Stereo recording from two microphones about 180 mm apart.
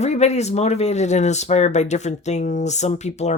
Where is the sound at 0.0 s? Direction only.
40° left (ahead or behind).